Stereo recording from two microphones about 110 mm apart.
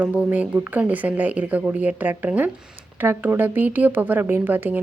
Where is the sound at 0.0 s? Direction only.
15° right (ahead or behind).